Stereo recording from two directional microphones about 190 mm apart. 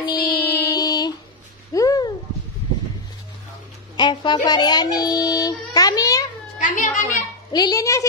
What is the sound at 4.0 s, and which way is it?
Speech, 25° left (ahead or behind).